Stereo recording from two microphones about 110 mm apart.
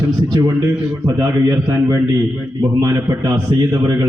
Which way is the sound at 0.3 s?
40° right (ahead or behind).